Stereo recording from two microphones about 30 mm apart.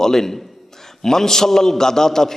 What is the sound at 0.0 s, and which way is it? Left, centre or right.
A man's voice, centre.